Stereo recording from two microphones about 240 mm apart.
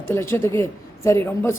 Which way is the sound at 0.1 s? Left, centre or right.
Centre.